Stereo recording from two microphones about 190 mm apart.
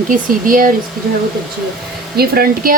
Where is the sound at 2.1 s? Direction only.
55° right (ahead or behind).